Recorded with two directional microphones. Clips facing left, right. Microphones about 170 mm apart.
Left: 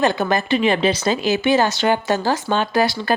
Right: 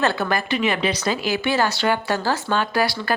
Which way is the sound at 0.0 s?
15° left (ahead or behind).